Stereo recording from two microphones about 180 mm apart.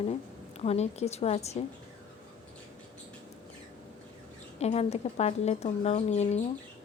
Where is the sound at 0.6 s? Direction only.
35° left (ahead or behind).